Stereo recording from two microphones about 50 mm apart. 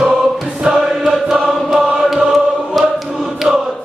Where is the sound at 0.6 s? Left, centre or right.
Centre.